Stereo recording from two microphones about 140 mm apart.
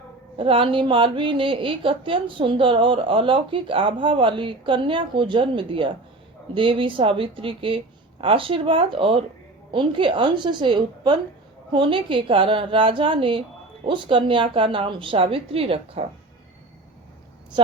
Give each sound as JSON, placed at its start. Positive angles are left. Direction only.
{"t": 0.3, "sound": "a woman's voice", "side_deg": -40}